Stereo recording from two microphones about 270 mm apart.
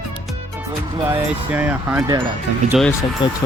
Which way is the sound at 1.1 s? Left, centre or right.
Centre.